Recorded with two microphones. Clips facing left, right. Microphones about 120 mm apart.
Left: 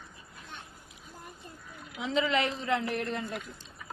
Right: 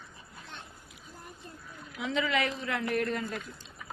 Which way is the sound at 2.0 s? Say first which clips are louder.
Left 2 dB; 30° left (ahead or behind).